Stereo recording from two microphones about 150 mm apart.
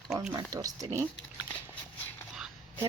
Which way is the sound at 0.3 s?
25° right (ahead or behind).